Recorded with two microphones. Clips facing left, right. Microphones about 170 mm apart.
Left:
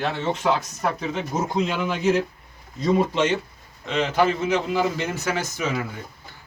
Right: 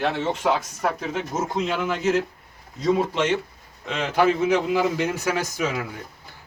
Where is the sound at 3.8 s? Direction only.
5° right (ahead or behind).